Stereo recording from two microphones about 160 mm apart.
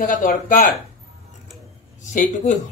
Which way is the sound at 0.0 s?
60° left (ahead or behind).